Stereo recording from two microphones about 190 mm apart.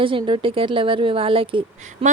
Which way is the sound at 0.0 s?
25° right (ahead or behind).